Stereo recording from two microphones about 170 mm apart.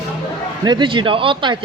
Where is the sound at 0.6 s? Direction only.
25° right (ahead or behind).